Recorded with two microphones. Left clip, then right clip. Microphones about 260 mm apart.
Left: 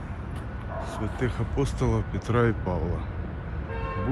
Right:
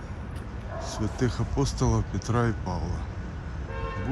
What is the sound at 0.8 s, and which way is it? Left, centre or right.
Speech, right.